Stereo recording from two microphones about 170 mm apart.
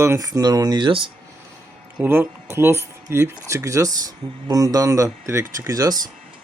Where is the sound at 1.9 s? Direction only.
10° right (ahead or behind).